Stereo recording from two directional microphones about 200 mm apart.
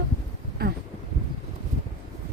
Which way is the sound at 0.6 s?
50° right (ahead or behind).